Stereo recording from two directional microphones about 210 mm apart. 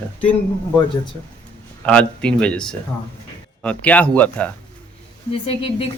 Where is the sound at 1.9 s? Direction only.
5° left (ahead or behind).